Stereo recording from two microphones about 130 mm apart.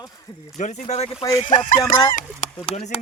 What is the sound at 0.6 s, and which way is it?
Speech, 60° left (ahead or behind).